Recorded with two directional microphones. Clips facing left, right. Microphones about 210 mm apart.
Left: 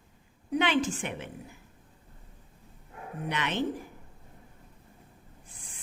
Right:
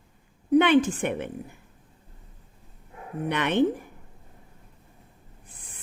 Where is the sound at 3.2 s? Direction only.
55° right (ahead or behind).